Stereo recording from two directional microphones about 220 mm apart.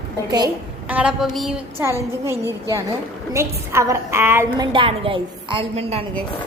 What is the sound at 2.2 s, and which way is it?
A woman's voice, 10° right (ahead or behind).